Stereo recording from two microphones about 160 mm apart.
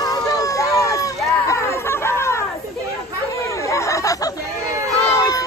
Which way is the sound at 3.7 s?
20° left (ahead or behind).